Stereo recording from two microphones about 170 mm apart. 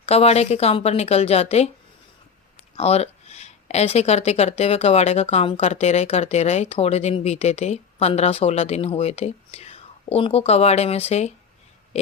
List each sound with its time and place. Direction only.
0.0 s speech: 35° left (ahead or behind)
2.7 s speech: 40° left (ahead or behind)